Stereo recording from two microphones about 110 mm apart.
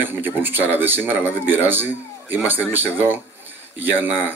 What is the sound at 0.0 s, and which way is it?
A man's voice, 20° right (ahead or behind).